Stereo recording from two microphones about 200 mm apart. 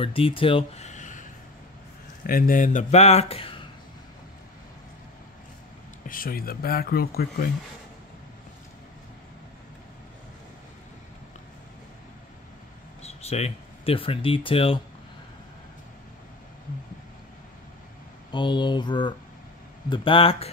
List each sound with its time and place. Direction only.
0.0 s speech: 25° left (ahead or behind)
2.2 s speech: 45° left (ahead or behind); by 3.6 s 25° left (ahead or behind)
6.0 s speech: 45° left (ahead or behind)
13.0 s speech: 30° left (ahead or behind)
18.3 s speech: 25° left (ahead or behind)